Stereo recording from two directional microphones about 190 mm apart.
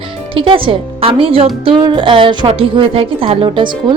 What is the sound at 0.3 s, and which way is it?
A woman's voice, 30° right (ahead or behind).